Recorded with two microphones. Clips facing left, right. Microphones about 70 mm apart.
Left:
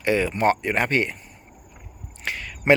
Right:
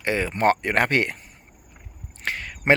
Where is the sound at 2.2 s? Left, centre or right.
Right.